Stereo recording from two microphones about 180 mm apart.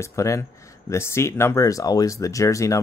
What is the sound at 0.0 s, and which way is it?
Speech, 15° left (ahead or behind).